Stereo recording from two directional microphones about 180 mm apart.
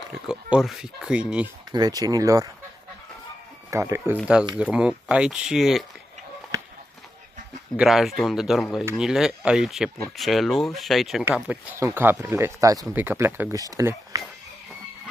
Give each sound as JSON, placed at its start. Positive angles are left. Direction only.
{"t": 0.3, "sound": "speech", "side_deg": -5}
{"t": 1.7, "sound": "speech", "side_deg": -20}
{"t": 3.7, "sound": "speech", "side_deg": -15}
{"t": 7.7, "sound": "speech", "side_deg": 0}